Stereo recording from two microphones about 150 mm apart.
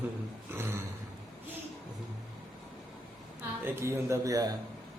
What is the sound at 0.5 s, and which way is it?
Speech, 15° right (ahead or behind).